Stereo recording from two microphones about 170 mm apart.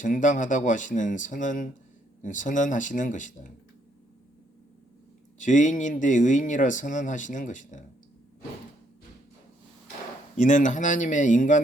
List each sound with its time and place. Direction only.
0.0 s speech: 50° left (ahead or behind)
5.4 s speech: 50° left (ahead or behind)
10.3 s speech: 45° left (ahead or behind)